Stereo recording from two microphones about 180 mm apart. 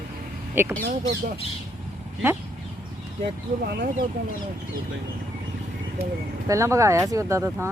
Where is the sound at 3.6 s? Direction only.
65° right (ahead or behind).